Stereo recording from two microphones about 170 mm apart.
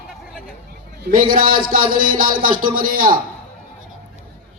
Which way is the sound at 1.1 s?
55° right (ahead or behind).